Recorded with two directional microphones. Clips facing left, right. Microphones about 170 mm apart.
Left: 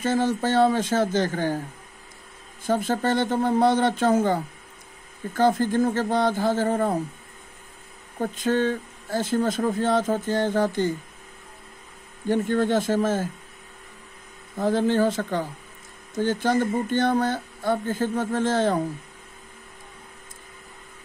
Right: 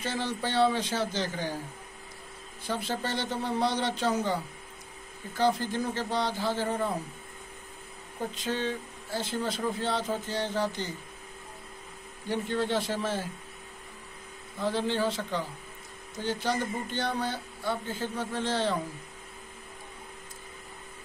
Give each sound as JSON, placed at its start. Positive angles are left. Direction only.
{"t": 0.0, "sound": "speech", "side_deg": 45}
{"t": 2.6, "sound": "speech", "side_deg": 45}
{"t": 8.2, "sound": "speech", "side_deg": 50}
{"t": 12.3, "sound": "speech", "side_deg": 50}
{"t": 14.6, "sound": "speech", "side_deg": 45}